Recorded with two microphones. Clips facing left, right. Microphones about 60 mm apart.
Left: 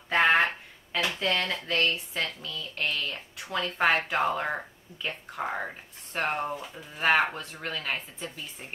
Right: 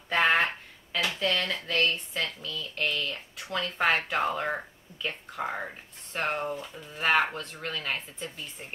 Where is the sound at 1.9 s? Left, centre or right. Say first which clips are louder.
Left 1 dB; centre.